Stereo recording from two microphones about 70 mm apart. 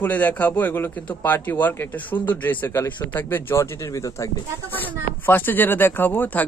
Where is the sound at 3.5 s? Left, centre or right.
Left.